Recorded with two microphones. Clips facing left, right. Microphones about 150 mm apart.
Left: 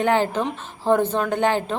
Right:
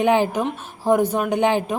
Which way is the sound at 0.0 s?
15° right (ahead or behind).